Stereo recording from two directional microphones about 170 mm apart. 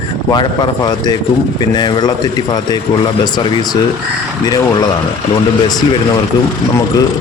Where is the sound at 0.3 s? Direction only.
25° left (ahead or behind).